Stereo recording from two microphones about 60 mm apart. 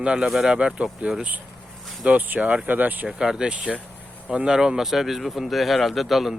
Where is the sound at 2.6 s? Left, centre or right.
Right.